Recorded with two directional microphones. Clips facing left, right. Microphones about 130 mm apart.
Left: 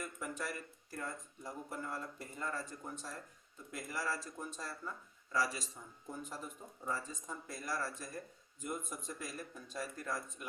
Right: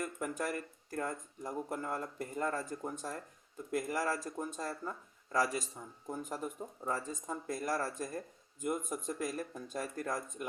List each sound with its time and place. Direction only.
0.0 s speech: 45° right (ahead or behind)